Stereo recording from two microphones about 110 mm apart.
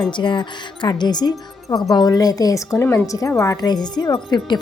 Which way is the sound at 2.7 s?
20° left (ahead or behind).